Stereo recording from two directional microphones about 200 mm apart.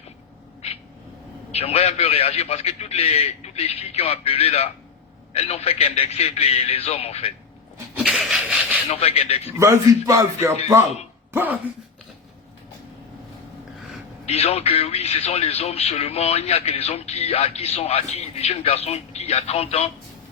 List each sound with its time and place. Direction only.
1.5 s speech: 30° left (ahead or behind)
7.9 s a sound: 5° right (ahead or behind)
8.9 s speech: 30° left (ahead or behind)
9.5 s speech: 15° right (ahead or behind)
14.3 s speech: 30° left (ahead or behind)